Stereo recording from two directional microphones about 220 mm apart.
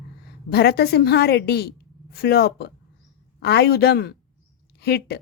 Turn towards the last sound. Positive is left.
turn(degrees=50)  # may be behind; listen again after turning